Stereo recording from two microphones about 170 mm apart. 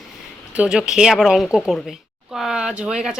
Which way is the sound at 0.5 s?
5° right (ahead or behind).